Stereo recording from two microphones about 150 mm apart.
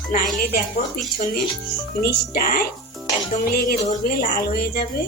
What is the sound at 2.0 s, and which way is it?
Speech, 85° left.